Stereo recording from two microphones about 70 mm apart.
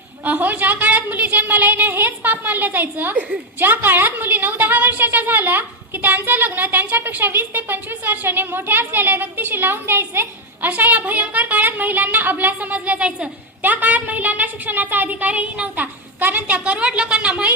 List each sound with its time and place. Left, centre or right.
0.3 s a woman's voice: right